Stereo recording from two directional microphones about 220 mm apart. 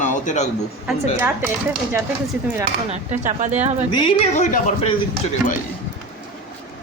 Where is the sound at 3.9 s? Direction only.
20° left (ahead or behind).